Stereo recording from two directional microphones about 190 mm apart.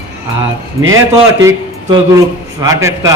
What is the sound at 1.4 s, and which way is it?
A man's voice, 20° right (ahead or behind).